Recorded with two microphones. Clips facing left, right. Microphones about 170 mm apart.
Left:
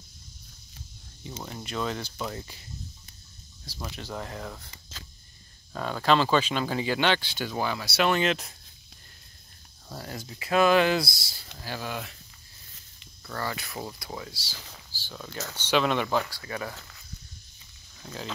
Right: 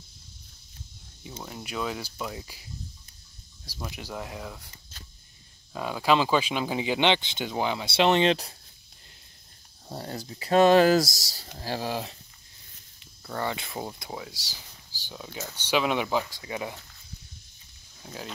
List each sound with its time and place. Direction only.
1.3 s speech: 5° right (ahead or behind)
4.6 s keys jangling: 90° left
5.7 s speech: 10° right (ahead or behind); by 8.5 s 30° right (ahead or behind)
9.8 s speech: 30° right (ahead or behind)
13.3 s speech: 20° right (ahead or behind)
14.9 s a sound: 15° right (ahead or behind)
15.5 s speech: 10° right (ahead or behind)
18.0 s speech: 10° right (ahead or behind)